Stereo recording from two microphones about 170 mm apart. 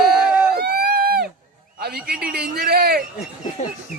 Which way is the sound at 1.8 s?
60° right (ahead or behind).